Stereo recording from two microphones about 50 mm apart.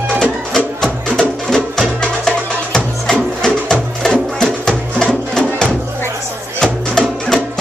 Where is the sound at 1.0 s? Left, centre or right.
Centre.